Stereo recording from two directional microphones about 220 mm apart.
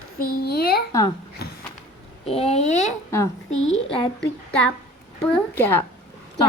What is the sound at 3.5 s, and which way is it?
Speech, 60° left (ahead or behind).